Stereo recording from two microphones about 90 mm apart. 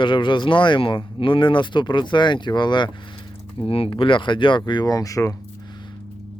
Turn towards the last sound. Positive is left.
turn(degrees=40)  # may be behind; listen again after turning